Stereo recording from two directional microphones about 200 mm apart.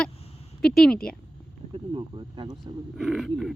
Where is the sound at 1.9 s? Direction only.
25° right (ahead or behind).